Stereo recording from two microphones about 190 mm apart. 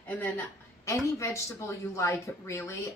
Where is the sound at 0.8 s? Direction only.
15° left (ahead or behind).